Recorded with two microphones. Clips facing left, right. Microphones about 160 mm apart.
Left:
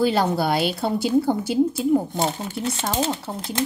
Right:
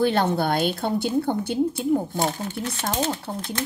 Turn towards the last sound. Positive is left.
turn(degrees=10)  # may be behind; listen again after turning